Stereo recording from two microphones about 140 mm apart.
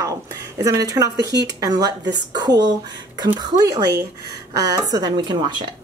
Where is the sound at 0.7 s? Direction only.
25° right (ahead or behind).